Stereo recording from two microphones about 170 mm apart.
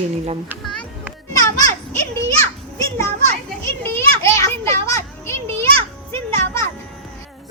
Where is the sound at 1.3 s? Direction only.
20° left (ahead or behind).